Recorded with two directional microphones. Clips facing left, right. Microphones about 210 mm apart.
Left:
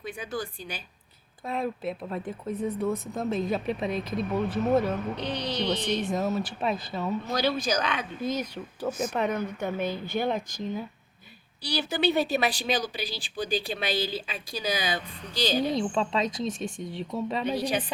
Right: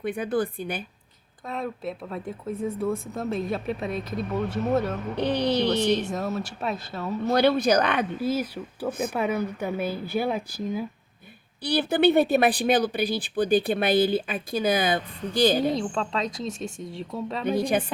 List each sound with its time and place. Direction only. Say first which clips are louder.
0.0 s speech: right 8 dB; 55° right (ahead or behind)
1.5 s speech: left 1 dB; 5° left (ahead or behind)
5.1 s speech: right 7 dB; 55° right (ahead or behind)
6.1 s speech: left 1 dB; centre (ahead or behind)
7.3 s speech: right 9 dB; 60° right (ahead or behind)
8.2 s speech: right 4 dB; 5° right (ahead or behind)
8.9 s speech: right 1 dB; 55° right (ahead or behind)
9.1 s speech: right 2 dB; 5° right (ahead or behind)
11.6 s speech: right 6 dB; 55° right (ahead or behind)
15.7 s speech: even; centre (ahead or behind)
16.5 s speech: even; 25° right (ahead or behind)
16.8 s speech: left 2 dB; centre (ahead or behind)
17.5 s a woman's voice: right 8 dB; 50° right (ahead or behind)